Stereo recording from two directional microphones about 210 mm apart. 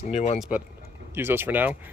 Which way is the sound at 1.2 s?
10° right (ahead or behind).